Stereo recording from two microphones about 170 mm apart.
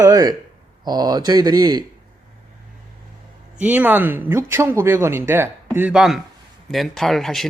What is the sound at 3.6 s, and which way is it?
Speech, 10° right (ahead or behind).